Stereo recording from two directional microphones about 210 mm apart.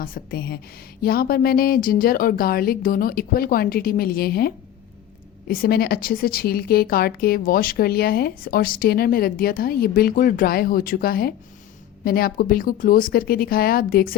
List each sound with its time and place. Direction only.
0.0 s a woman's voice: 45° left (ahead or behind)